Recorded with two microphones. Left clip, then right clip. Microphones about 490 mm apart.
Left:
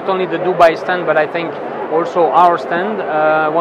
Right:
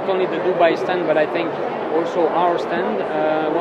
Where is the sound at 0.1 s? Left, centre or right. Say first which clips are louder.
Left 4 dB; left.